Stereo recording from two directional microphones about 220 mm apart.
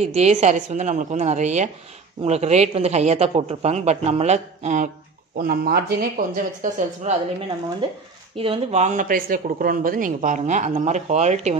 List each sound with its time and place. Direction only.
0.0 s speech: 30° right (ahead or behind)
5.4 s speech: 45° right (ahead or behind)
8.4 s speech: 25° right (ahead or behind)